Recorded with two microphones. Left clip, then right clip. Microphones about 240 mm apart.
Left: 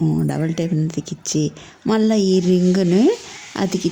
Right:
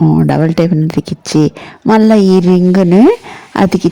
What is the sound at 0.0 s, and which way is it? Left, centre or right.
Speech, right.